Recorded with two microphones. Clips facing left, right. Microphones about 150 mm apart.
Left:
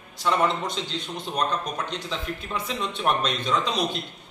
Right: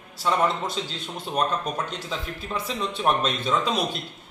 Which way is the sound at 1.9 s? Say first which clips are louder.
Left 1 dB; 5° right (ahead or behind).